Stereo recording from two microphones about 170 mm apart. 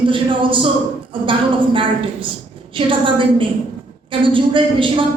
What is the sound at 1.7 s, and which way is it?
A woman's voice, 30° right (ahead or behind).